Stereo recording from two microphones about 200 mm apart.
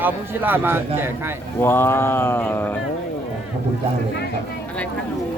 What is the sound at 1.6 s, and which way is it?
Speech, 10° left (ahead or behind).